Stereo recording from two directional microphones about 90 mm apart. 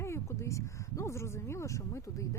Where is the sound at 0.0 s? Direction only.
30° left (ahead or behind).